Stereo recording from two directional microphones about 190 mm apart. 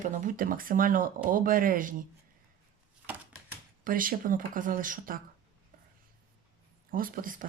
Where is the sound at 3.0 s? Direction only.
10° right (ahead or behind).